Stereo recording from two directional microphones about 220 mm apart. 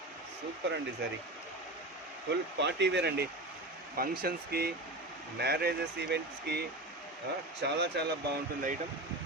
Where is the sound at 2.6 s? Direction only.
50° right (ahead or behind).